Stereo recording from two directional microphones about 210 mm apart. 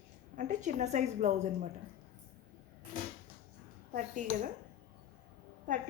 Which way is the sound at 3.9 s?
40° right (ahead or behind).